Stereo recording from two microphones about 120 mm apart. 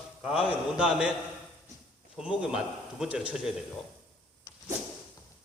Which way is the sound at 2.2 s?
5° right (ahead or behind).